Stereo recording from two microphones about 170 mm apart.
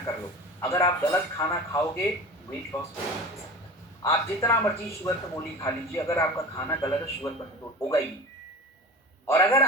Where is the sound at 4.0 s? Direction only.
15° left (ahead or behind).